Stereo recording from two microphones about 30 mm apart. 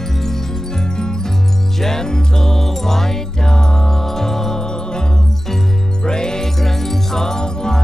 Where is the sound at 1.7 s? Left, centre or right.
Centre.